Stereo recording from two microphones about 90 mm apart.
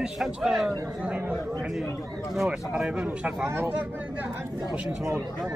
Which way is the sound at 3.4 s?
25° right (ahead or behind).